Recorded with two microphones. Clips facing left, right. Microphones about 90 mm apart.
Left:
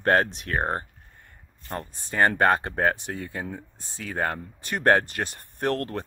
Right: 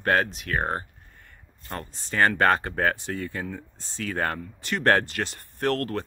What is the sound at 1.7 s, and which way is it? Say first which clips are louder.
Speech: even; 20° left (ahead or behind).